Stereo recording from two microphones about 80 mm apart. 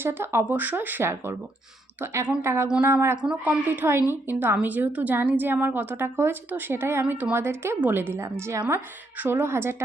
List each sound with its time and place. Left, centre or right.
0.0 s a woman's voice: right
1.1 s a woman's voice: right
2.4 s a woman's voice: right
3.4 s a woman's voice: right